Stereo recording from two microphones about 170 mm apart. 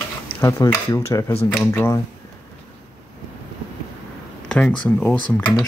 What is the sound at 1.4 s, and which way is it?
Speech, 10° left (ahead or behind).